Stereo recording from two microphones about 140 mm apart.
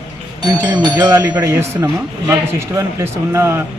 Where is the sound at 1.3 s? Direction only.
15° right (ahead or behind).